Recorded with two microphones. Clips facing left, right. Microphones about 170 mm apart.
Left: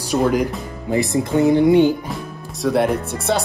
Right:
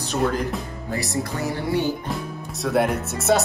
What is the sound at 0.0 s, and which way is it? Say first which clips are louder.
Speech: left 5 dB; 10° left (ahead or behind).